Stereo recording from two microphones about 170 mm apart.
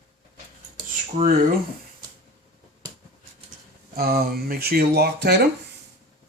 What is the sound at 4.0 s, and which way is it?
Speech, 65° right (ahead or behind).